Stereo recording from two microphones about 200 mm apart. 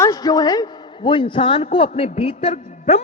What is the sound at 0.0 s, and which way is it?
A man's voice, 20° left (ahead or behind).